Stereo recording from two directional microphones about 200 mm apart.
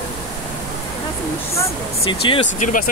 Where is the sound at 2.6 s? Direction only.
40° left (ahead or behind).